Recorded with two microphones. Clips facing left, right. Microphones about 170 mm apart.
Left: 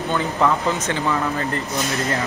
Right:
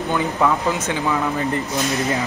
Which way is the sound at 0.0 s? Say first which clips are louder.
Right 1 dB; 15° right (ahead or behind).